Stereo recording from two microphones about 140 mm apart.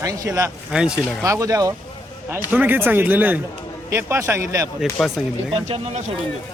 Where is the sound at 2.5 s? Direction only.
10° right (ahead or behind).